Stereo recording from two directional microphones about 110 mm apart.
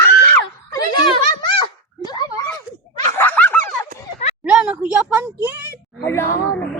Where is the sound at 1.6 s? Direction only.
40° left (ahead or behind).